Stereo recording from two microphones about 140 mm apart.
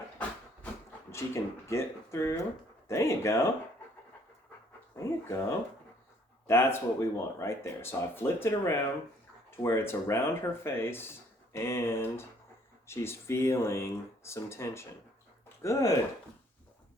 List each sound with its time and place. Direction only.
1.1 s speech: 20° left (ahead or behind)
4.9 s speech: 20° left (ahead or behind)